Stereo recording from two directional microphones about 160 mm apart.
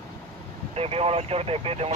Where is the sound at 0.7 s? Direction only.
40° right (ahead or behind).